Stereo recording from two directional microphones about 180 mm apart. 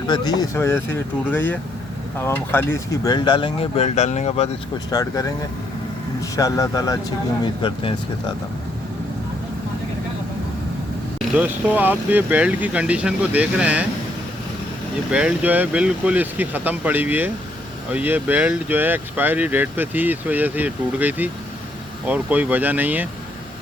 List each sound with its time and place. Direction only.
0.1 s speech: 20° left (ahead or behind); by 4.4 s 35° left (ahead or behind)
4.9 s speech: 20° left (ahead or behind)
6.3 s speech: 20° left (ahead or behind)
11.3 s speech: 10° right (ahead or behind)
15.1 s speech: 5° right (ahead or behind)